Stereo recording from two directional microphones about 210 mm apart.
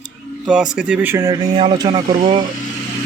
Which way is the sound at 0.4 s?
5° right (ahead or behind).